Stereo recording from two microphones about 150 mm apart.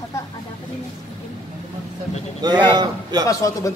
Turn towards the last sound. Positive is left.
turn(degrees=20)  # may be behind; listen again after turning